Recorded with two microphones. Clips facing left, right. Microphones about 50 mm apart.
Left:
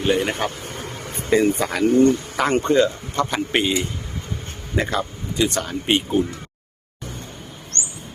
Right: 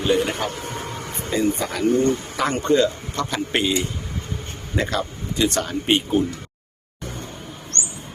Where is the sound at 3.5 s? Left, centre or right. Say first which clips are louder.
Left 1 dB; centre.